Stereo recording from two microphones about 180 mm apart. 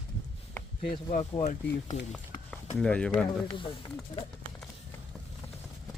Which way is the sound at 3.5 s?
25° left (ahead or behind).